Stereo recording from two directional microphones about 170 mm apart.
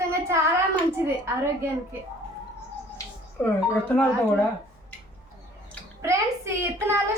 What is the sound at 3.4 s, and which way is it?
Speech, 10° left (ahead or behind).